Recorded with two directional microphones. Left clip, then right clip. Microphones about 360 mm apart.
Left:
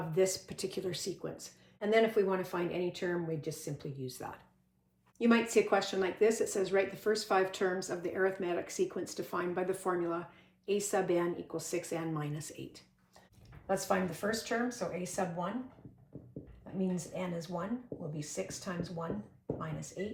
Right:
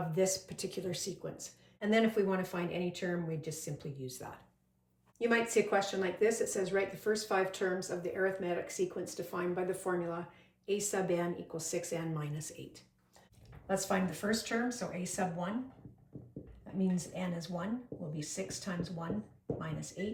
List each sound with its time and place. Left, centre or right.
0.1 s speech: centre
16.8 s speech: centre